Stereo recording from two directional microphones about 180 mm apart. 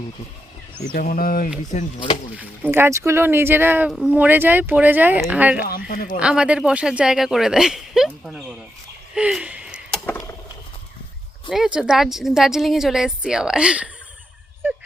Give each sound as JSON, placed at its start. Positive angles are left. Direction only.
{"t": 0.9, "sound": "speech", "side_deg": 50}
{"t": 1.7, "sound": "speech", "side_deg": 40}
{"t": 2.4, "sound": "speech", "side_deg": -10}
{"t": 5.6, "sound": "speech", "side_deg": 55}
{"t": 6.1, "sound": "speech", "side_deg": -5}
{"t": 9.1, "sound": "a sound", "side_deg": -5}
{"t": 11.4, "sound": "speech", "side_deg": 0}